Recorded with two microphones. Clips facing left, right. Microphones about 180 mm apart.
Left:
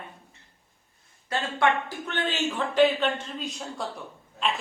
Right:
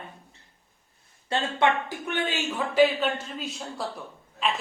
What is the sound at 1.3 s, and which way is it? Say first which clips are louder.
Speech: right 1 dB; 20° right (ahead or behind).